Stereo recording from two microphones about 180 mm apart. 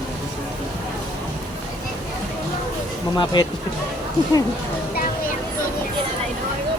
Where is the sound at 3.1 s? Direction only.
25° left (ahead or behind).